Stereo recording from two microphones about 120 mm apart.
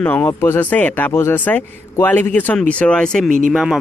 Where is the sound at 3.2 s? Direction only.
90° right.